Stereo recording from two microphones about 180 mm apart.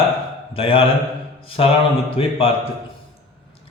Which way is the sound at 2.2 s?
30° left (ahead or behind).